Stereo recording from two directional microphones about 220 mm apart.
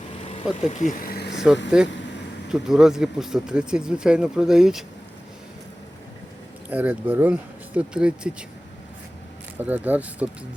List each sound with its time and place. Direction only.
0.7 s speech: 35° left (ahead or behind)
1.4 s speech: 5° right (ahead or behind)
6.7 s speech: 5° right (ahead or behind)
9.6 s speech: 10° right (ahead or behind)